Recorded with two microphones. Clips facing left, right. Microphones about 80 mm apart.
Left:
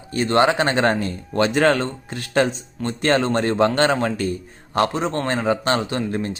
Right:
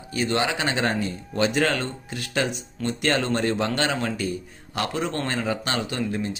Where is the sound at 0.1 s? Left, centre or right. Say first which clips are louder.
Left 7 dB; left.